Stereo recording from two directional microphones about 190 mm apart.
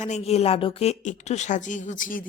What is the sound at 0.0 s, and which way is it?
Speech, 35° left (ahead or behind).